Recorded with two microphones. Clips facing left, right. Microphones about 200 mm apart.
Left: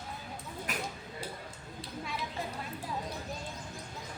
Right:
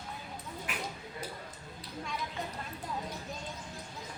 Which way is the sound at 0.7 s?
40° left (ahead or behind).